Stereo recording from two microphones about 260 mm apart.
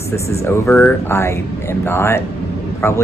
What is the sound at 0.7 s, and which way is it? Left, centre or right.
A woman's voice, centre.